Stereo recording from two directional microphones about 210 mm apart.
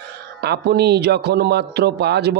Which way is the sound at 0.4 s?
50° right (ahead or behind).